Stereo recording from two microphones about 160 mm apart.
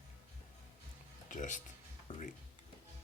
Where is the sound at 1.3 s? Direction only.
55° left (ahead or behind).